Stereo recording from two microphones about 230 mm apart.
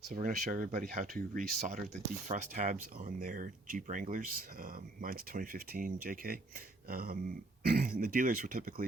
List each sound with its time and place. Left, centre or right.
0.1 s speech: right